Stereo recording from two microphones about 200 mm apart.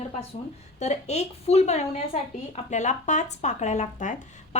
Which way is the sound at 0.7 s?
35° left (ahead or behind).